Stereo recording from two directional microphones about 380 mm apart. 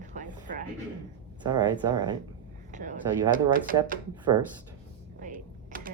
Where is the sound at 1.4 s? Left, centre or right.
Centre.